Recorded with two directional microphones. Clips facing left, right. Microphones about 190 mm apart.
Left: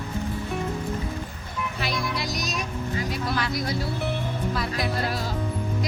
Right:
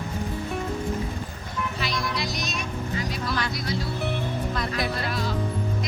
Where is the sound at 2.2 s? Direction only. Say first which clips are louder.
Even; 45° left (ahead or behind).